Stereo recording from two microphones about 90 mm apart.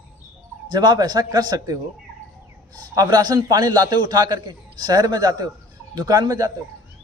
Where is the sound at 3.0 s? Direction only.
50° right (ahead or behind).